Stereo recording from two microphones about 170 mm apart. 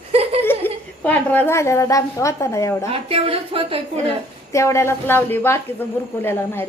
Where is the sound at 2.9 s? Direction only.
35° right (ahead or behind).